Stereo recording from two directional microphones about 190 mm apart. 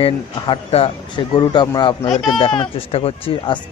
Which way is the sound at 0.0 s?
30° left (ahead or behind).